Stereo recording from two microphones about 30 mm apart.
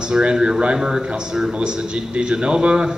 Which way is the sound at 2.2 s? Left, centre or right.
Right.